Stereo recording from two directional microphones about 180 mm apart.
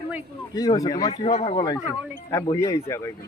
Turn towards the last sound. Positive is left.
turn(degrees=15)  # may be behind; listen again after turning